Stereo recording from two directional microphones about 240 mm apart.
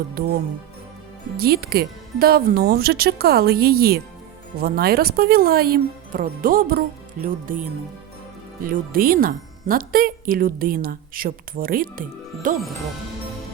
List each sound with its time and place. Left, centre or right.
0.1 s speech: right
1.4 s speech: right